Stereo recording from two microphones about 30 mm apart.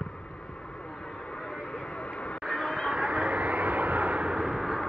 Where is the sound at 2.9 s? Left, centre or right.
Right.